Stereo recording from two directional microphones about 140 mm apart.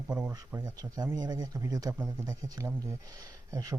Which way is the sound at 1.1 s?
30° right (ahead or behind).